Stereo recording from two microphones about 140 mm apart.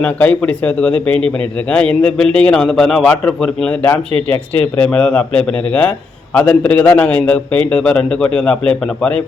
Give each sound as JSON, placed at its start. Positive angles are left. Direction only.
{"t": 0.0, "sound": "a man's voice", "side_deg": 10}